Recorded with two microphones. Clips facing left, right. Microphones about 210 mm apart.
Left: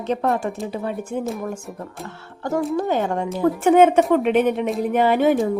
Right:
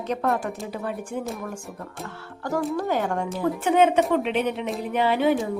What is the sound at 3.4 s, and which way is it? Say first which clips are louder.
Speech: left 6 dB; 50° left (ahead or behind).